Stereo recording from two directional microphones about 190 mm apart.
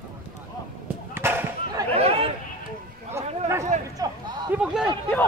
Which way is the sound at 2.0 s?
30° right (ahead or behind).